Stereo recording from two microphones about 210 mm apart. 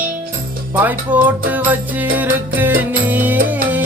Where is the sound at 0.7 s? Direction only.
10° right (ahead or behind).